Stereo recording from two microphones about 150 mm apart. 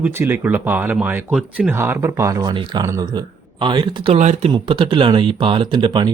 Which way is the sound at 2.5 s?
30° right (ahead or behind).